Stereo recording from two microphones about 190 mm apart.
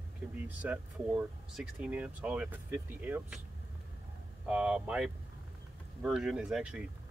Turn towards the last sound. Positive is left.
turn(degrees=-5)  # may be behind; listen again after turning